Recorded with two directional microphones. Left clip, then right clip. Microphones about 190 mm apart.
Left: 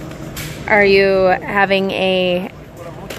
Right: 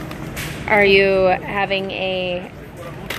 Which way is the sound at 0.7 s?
15° left (ahead or behind).